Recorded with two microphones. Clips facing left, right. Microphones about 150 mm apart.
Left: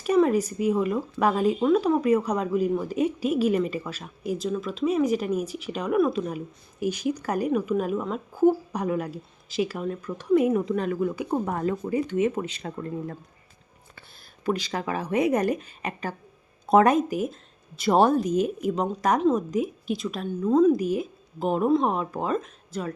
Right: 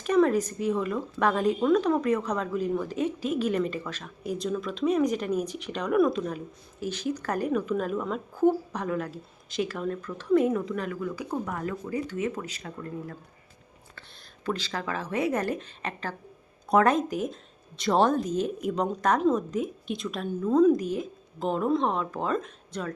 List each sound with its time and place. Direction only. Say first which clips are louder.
0.0 s speech: left 2 dB; 5° left (ahead or behind)
10.6 s speech: left 6 dB; 20° left (ahead or behind)
14.4 s speech: left 4 dB; 15° left (ahead or behind)
16.6 s speech: left 3 dB; 20° left (ahead or behind)
16.9 s a woman's voice: left 3 dB; 5° left (ahead or behind)